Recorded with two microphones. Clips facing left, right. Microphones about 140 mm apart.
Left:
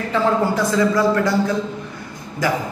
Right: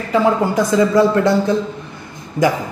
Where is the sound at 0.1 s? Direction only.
15° right (ahead or behind).